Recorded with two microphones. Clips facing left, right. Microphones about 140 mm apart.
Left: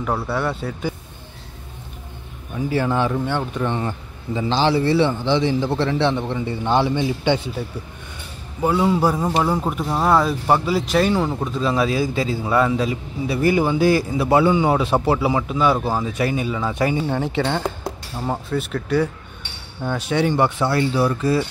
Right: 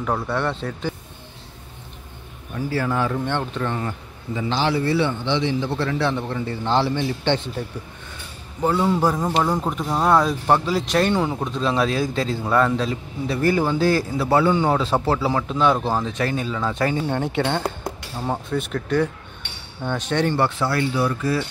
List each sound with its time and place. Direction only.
0.0 s a man's voice: 5° left (ahead or behind)
2.5 s a man's voice: 20° left (ahead or behind)
3.1 s a man's voice: 10° left (ahead or behind)
3.7 s a man's voice: 25° left (ahead or behind); by 17.0 s 10° left (ahead or behind)
17.0 s a man's voice: centre (ahead or behind); by 21.5 s 25° left (ahead or behind)